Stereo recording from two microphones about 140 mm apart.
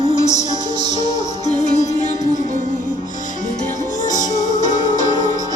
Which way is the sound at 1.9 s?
55° left (ahead or behind).